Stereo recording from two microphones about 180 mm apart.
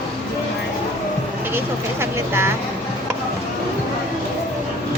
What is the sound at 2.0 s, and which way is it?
Speech, 15° right (ahead or behind).